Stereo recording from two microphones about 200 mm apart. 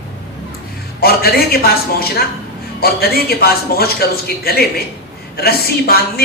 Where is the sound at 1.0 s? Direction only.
50° left (ahead or behind).